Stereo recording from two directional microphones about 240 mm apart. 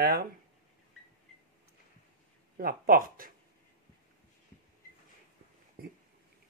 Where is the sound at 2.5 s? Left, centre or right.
Right.